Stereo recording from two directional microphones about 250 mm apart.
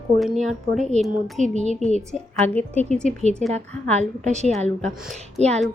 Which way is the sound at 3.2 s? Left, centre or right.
Right.